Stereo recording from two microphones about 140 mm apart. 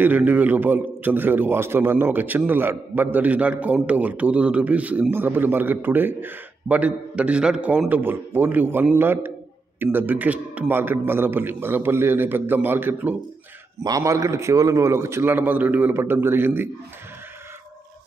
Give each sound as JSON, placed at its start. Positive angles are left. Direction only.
{"t": 0.0, "sound": "a man's voice", "side_deg": -15}